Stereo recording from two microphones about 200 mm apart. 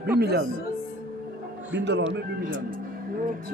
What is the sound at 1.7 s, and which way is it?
Speech, 60° right (ahead or behind).